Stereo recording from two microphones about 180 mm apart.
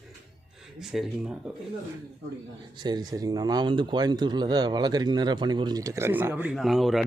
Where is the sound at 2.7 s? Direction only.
25° right (ahead or behind).